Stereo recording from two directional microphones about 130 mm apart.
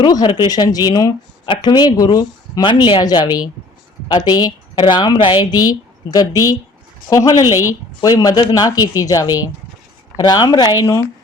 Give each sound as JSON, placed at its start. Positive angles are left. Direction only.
{"t": 0.0, "sound": "a woman's voice", "side_deg": 35}